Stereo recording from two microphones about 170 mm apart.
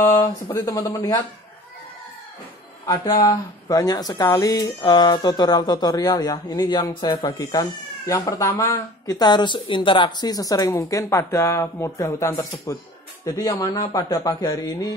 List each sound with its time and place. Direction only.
0.0 s speech: 20° left (ahead or behind)
2.9 s speech: 25° left (ahead or behind)